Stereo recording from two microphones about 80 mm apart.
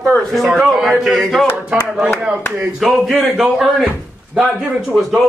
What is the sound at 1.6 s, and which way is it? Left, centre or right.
A man's voice, centre.